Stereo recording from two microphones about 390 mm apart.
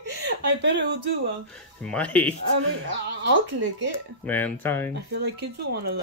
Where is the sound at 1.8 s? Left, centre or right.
Centre.